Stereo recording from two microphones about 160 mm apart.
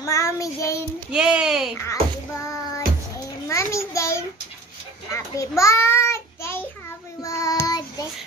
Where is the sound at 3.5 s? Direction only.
20° left (ahead or behind).